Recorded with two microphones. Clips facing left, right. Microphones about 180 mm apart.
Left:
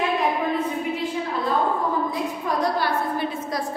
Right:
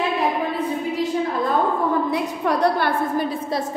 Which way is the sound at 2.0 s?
65° right (ahead or behind).